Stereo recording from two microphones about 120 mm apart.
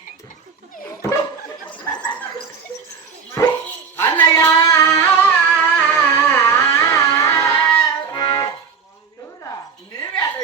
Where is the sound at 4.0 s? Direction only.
25° left (ahead or behind).